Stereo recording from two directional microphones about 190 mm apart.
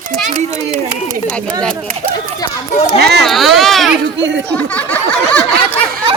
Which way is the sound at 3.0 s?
60° right (ahead or behind).